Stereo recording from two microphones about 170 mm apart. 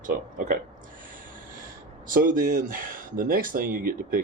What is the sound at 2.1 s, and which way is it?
Speech, 55° right (ahead or behind).